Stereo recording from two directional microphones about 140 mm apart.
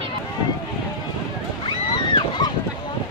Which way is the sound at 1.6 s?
35° left (ahead or behind).